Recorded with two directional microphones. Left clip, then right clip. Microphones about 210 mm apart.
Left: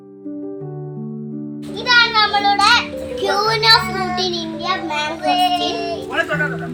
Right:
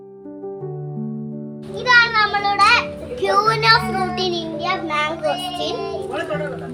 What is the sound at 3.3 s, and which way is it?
Music, 20° right (ahead or behind).